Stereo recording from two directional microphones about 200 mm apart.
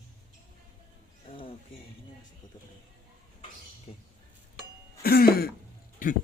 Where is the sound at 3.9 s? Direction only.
30° left (ahead or behind).